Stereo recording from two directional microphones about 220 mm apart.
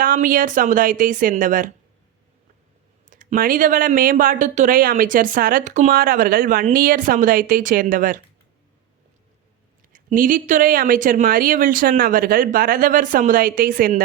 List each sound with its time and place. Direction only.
0.0 s speech: 40° right (ahead or behind)
3.1 s speech: 35° right (ahead or behind)
9.9 s speech: 35° right (ahead or behind)